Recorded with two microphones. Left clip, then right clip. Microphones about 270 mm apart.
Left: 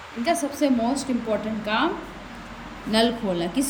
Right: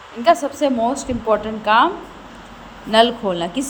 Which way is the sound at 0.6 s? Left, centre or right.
Centre.